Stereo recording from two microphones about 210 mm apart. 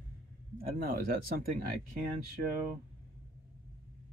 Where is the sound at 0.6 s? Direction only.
45° right (ahead or behind).